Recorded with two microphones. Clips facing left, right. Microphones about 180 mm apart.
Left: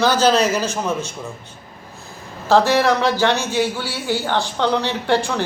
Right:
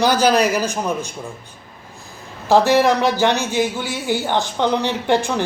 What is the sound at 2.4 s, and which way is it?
Speech, 15° right (ahead or behind).